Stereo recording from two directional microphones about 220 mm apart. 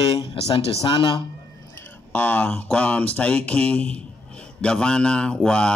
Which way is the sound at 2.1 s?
10° left (ahead or behind).